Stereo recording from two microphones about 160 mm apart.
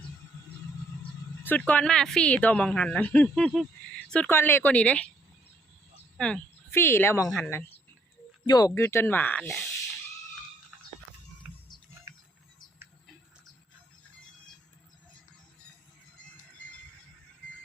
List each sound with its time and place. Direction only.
1.5 s speech: 10° left (ahead or behind)
6.1 s speech: 5° left (ahead or behind)
8.4 s speech: 25° left (ahead or behind)
11.4 s a sound: 10° right (ahead or behind)